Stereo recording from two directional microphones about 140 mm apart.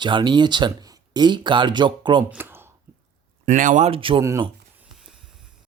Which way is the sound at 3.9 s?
40° right (ahead or behind).